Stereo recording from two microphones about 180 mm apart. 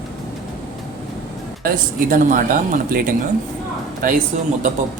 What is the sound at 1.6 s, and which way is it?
Speech, 50° right (ahead or behind).